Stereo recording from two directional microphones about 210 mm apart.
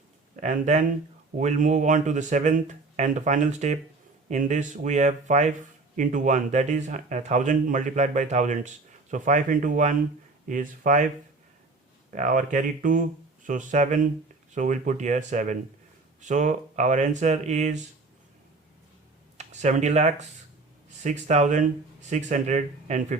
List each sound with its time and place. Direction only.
0.3 s speech: 35° right (ahead or behind)
12.1 s speech: 40° right (ahead or behind)
19.4 s speech: 35° right (ahead or behind)